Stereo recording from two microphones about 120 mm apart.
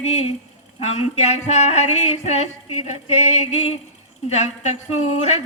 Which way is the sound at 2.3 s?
65° left (ahead or behind).